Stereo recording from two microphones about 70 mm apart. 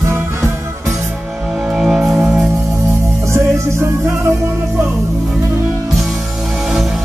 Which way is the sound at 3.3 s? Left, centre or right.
Right.